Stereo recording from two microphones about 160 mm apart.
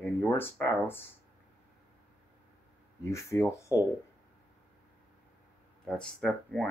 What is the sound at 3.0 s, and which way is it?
Speech, 20° left (ahead or behind).